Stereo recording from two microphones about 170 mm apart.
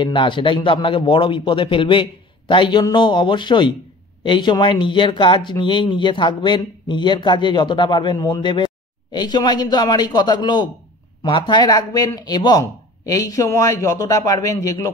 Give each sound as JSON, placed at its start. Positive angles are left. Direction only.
{"t": 0.0, "sound": "speech", "side_deg": 30}